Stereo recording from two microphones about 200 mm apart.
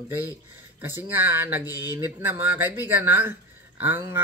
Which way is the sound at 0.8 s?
10° right (ahead or behind).